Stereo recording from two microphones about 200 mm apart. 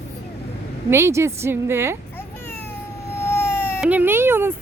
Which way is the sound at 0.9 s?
15° right (ahead or behind).